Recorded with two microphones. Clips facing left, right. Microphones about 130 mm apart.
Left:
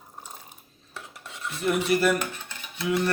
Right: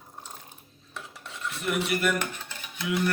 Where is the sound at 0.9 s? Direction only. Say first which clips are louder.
Even; 10° left (ahead or behind).